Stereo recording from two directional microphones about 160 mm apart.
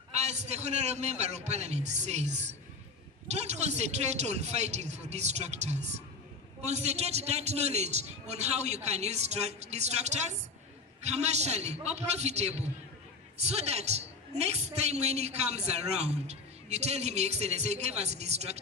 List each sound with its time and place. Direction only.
0.1 s a woman's voice: 45° right (ahead or behind)